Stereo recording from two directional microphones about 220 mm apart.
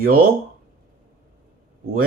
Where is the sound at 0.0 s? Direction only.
40° right (ahead or behind).